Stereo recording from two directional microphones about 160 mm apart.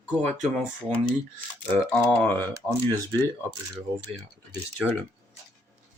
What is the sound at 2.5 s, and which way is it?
Speech, 20° right (ahead or behind).